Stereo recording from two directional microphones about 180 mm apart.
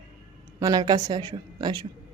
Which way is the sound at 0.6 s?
20° right (ahead or behind).